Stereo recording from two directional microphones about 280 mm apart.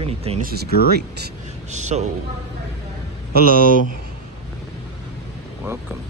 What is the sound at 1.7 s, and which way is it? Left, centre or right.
Speech, right.